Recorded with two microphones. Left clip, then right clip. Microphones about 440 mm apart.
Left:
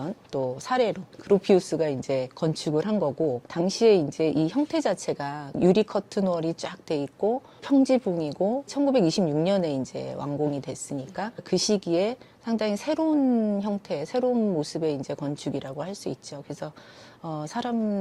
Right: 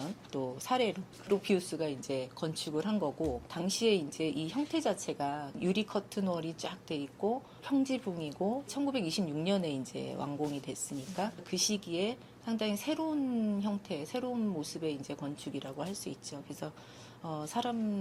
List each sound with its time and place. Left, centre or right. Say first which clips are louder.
0.3 s a woman's voice: left 8 dB; left